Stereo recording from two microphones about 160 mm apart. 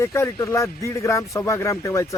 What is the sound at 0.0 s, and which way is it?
A man's voice, 15° left (ahead or behind).